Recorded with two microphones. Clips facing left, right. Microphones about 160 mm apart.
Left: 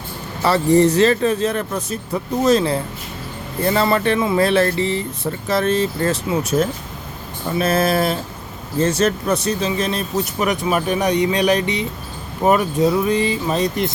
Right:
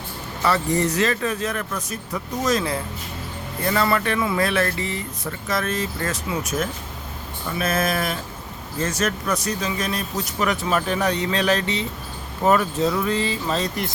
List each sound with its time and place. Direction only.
0.4 s speech: 30° left (ahead or behind)